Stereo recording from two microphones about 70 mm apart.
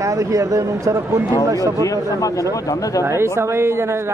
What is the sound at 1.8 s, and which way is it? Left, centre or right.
A man's voice, left.